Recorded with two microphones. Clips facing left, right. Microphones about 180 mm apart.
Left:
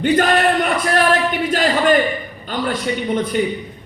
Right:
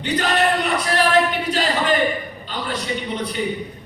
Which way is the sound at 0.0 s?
50° left (ahead or behind).